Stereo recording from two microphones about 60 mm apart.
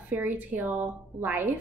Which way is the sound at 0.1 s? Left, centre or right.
Right.